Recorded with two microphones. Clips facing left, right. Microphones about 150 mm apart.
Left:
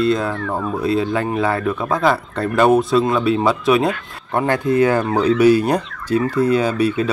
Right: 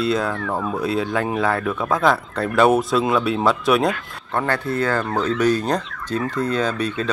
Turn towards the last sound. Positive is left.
turn(degrees=10)  # may be behind; listen again after turning